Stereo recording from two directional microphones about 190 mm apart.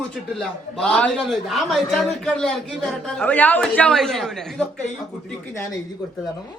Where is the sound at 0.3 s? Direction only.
5° left (ahead or behind).